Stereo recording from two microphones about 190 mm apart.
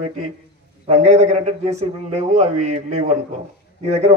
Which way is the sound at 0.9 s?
35° right (ahead or behind).